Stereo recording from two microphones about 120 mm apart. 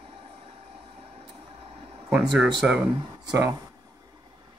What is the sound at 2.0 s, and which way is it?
Speech, 10° right (ahead or behind).